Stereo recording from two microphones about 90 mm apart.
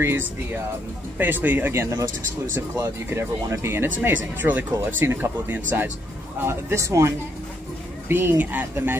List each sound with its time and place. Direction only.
0.0 s speech: 25° right (ahead or behind)
3.1 s a man's voice: 30° right (ahead or behind)
8.1 s speech: 20° right (ahead or behind)